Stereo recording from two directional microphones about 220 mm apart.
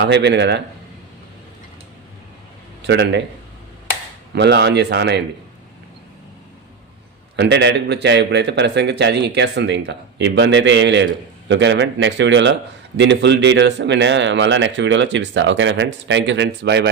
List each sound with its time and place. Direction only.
0.0 s a man's voice: 50° right (ahead or behind)
2.8 s a man's voice: 50° right (ahead or behind)
4.4 s a man's voice: 50° right (ahead or behind)
7.3 s a man's voice: 50° right (ahead or behind)